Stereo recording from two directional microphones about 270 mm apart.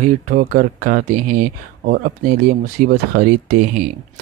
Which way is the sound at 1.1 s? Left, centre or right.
Right.